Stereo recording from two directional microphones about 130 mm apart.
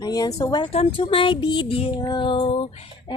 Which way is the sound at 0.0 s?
30° left (ahead or behind).